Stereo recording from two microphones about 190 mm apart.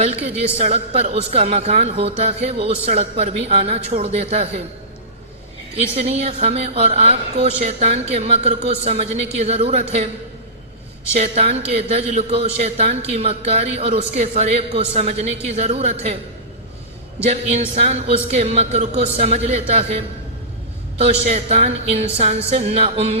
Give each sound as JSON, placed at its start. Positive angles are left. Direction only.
{"t": 0.0, "sound": "a woman's voice", "side_deg": -35}
{"t": 5.7, "sound": "a woman's voice", "side_deg": -35}
{"t": 11.1, "sound": "a woman's voice", "side_deg": -35}
{"t": 17.2, "sound": "a woman's voice", "side_deg": -35}
{"t": 21.0, "sound": "a woman's voice", "side_deg": -35}